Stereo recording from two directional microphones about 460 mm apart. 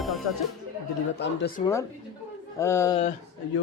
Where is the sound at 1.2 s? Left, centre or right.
Left.